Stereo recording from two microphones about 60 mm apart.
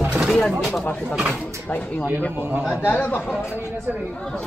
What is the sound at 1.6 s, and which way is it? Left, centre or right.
Speech, left.